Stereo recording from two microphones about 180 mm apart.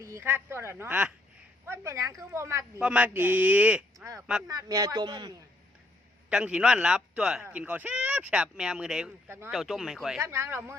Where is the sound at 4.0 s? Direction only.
15° right (ahead or behind).